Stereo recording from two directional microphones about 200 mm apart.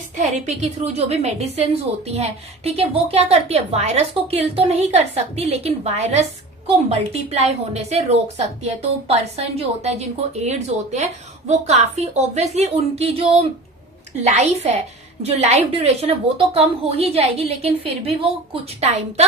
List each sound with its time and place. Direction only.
0.2 s a woman's voice: 35° right (ahead or behind)
14.3 s a woman's voice: 35° right (ahead or behind)